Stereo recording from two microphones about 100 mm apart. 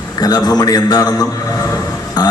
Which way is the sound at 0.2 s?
40° left (ahead or behind).